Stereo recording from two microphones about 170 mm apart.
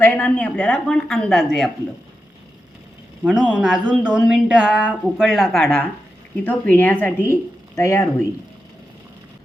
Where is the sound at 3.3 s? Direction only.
5° right (ahead or behind); by 8.3 s 15° left (ahead or behind).